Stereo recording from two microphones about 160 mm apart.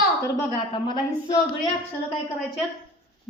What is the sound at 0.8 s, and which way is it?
Speech, 25° left (ahead or behind).